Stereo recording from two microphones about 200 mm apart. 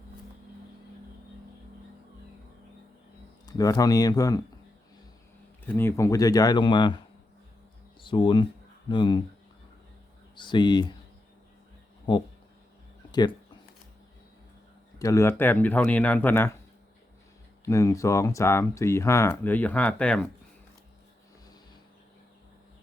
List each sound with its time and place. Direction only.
3.4 s speech: 20° left (ahead or behind)
5.6 s speech: 10° left (ahead or behind)
8.0 s speech: 25° left (ahead or behind)
10.3 s speech: 25° left (ahead or behind)
12.1 s speech: 25° left (ahead or behind)
13.1 s a sound: 20° left (ahead or behind)
14.9 s speech: 15° left (ahead or behind)
17.7 s speech: 15° left (ahead or behind)